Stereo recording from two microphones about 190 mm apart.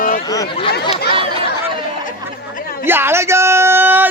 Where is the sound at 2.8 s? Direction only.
10° right (ahead or behind).